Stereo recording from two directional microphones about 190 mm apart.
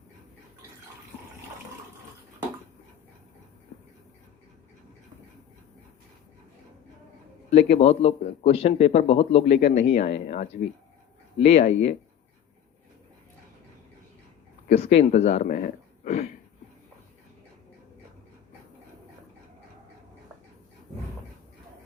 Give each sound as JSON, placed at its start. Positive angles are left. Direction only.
{"t": 7.5, "sound": "a man's voice", "side_deg": 35}
{"t": 14.7, "sound": "speech", "side_deg": 35}